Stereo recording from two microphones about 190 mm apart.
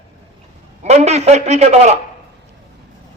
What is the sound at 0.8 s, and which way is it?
A man's voice, 35° right (ahead or behind).